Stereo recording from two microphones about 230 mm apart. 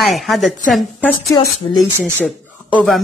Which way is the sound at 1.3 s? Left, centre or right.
Centre.